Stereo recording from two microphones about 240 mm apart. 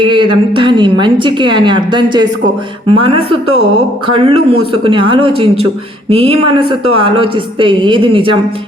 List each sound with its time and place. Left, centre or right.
0.0 s a woman's voice: right